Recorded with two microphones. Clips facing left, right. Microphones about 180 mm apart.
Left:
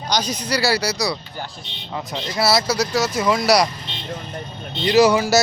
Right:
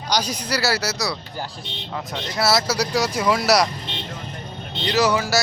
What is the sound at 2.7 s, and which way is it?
Speech, 10° right (ahead or behind).